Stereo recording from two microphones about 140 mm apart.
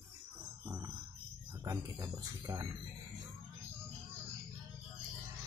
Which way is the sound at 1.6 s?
25° right (ahead or behind).